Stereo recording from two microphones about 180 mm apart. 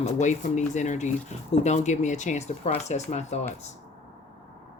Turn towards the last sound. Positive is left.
turn(degrees=40)  # may be behind; listen again after turning